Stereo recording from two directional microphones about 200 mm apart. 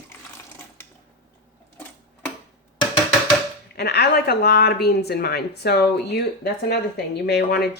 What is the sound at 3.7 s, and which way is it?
Speech, 55° left (ahead or behind).